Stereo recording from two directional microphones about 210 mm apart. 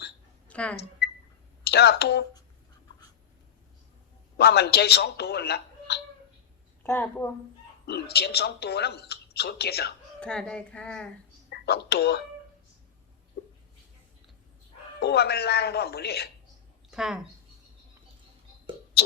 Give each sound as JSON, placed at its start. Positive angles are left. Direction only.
{"t": 0.4, "sound": "a sound", "side_deg": 5}
{"t": 1.6, "sound": "speech", "side_deg": 50}
{"t": 4.4, "sound": "a man's voice", "side_deg": 50}
{"t": 6.8, "sound": "a woman's voice", "side_deg": 10}
{"t": 7.9, "sound": "speech", "side_deg": 50}
{"t": 10.2, "sound": "speech", "side_deg": 5}
{"t": 11.4, "sound": "speech", "side_deg": 50}
{"t": 15.0, "sound": "speech", "side_deg": 50}
{"t": 16.9, "sound": "speech", "side_deg": -5}